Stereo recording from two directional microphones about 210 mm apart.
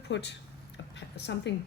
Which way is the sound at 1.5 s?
60° left (ahead or behind).